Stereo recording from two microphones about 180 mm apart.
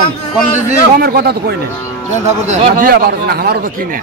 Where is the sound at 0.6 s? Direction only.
55° right (ahead or behind).